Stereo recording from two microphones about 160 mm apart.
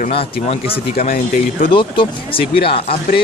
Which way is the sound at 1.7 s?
30° left (ahead or behind).